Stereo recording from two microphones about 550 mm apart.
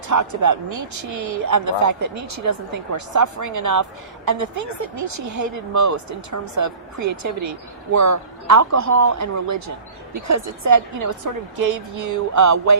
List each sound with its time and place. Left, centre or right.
0.1 s speech: right